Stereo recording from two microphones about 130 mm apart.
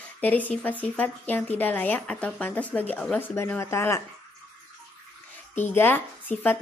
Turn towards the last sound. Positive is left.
turn(degrees=15)  # may be behind; listen again after turning